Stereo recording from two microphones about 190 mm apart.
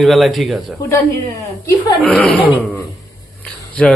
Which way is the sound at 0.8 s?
15° left (ahead or behind).